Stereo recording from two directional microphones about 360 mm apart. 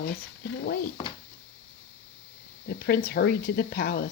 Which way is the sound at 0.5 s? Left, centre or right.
Left.